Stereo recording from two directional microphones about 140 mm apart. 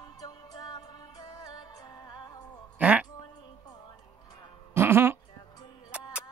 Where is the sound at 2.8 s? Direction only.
10° right (ahead or behind).